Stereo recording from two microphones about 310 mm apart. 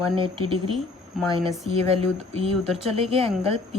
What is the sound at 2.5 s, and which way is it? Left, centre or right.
Speech, centre.